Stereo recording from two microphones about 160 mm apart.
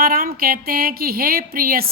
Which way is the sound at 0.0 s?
70° right (ahead or behind).